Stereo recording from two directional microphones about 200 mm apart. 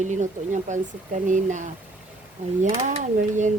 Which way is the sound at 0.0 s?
35° right (ahead or behind).